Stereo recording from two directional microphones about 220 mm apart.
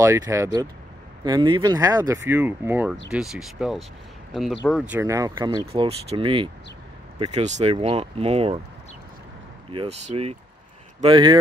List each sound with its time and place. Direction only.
0.0 s speech: 15° right (ahead or behind)
9.7 s speech: 25° right (ahead or behind)